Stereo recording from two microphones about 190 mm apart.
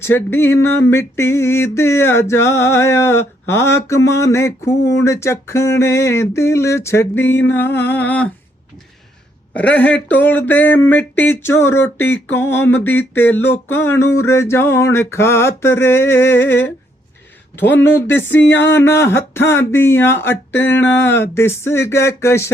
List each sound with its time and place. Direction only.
0.0 s speech: 10° left (ahead or behind)
9.6 s speech: 5° left (ahead or behind)